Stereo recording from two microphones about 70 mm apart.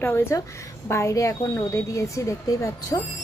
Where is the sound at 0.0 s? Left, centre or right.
Left.